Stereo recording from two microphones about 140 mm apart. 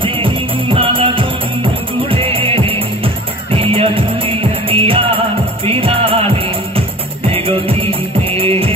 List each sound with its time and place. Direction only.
0.0 s music: 40° right (ahead or behind)